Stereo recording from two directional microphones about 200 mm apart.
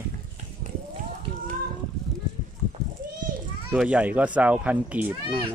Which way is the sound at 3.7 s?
5° right (ahead or behind).